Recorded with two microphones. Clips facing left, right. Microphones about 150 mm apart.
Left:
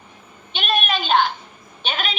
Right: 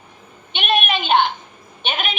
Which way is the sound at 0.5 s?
Centre (ahead or behind).